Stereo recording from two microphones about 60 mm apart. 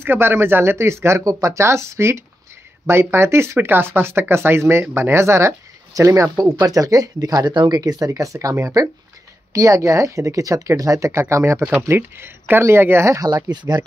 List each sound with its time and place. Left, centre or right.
0.0 s speech: right
6.6 s speech: right
11.6 s speech: right
13.1 s speech: right
13.7 s speech: right